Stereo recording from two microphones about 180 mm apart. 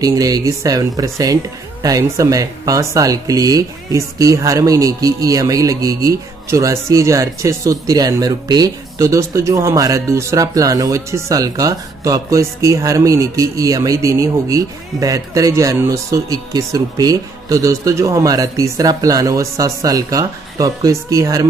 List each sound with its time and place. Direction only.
0.0 s speech: 20° right (ahead or behind)